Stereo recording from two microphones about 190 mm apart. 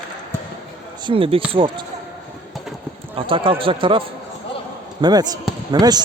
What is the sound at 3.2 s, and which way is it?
A man's voice, 25° right (ahead or behind).